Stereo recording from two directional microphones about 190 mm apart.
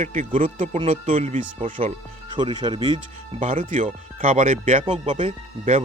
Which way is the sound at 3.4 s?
40° right (ahead or behind).